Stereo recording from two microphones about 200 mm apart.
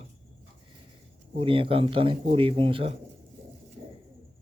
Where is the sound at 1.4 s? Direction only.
25° right (ahead or behind).